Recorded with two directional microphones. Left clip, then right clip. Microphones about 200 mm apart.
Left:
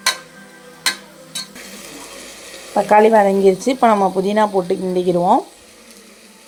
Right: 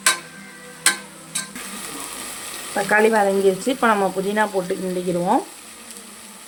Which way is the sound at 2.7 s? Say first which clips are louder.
Left 6 dB; 20° left (ahead or behind).